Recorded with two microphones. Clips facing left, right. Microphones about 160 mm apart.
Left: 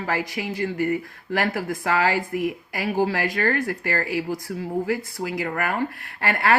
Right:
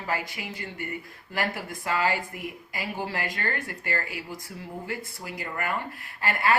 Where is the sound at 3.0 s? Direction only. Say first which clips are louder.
Left 8 dB; 85° left; by 6.5 s 70° left (ahead or behind).